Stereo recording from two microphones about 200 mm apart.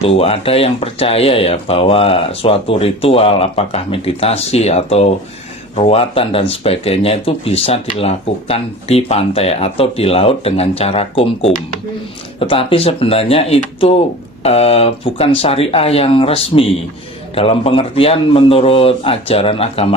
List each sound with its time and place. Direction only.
0.0 s speech: 30° left (ahead or behind)